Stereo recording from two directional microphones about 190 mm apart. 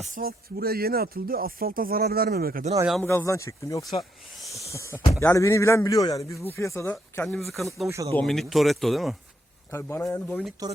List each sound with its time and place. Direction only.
0.0 s speech: 45° right (ahead or behind)
3.0 s a man's voice: 10° left (ahead or behind)
7.9 s speech: 15° right (ahead or behind)
8.1 s speech: 5° left (ahead or behind)
9.7 s a man's voice: 15° left (ahead or behind)
10.6 s speech: 20° right (ahead or behind)